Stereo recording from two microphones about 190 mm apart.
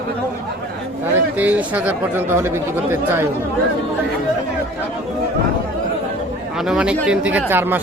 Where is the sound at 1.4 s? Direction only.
10° right (ahead or behind).